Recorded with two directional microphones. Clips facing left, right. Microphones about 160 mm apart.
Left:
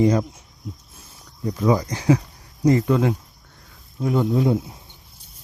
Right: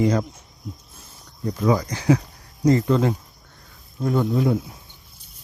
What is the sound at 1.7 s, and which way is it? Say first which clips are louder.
Speech: left 1 dB; 20° left (ahead or behind).